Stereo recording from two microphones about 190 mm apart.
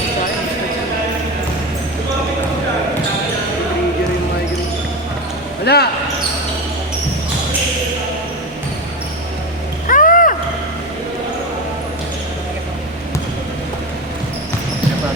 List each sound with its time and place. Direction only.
5.6 s speech: 60° left (ahead or behind)
9.8 s vehicle: 45° left (ahead or behind)